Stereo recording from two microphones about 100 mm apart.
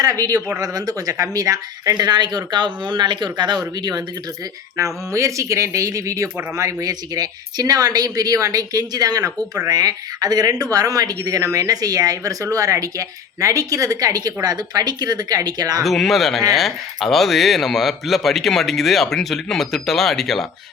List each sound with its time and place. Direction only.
0.0 s speech: 35° right (ahead or behind)
4.8 s speech: 30° right (ahead or behind)
15.8 s speech: centre (ahead or behind)